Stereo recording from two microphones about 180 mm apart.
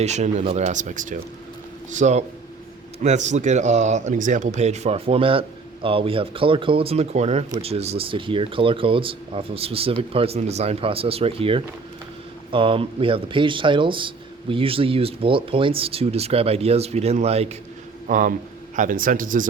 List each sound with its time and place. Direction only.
0.0 s speech: 40° right (ahead or behind)
18.1 s a man's voice: 45° right (ahead or behind)